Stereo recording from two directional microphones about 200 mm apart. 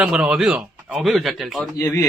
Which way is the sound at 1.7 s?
15° left (ahead or behind).